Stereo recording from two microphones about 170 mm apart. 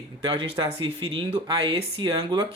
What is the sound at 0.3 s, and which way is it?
Speech, 25° right (ahead or behind).